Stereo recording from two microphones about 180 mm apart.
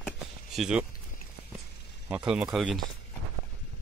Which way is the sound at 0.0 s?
Centre (ahead or behind).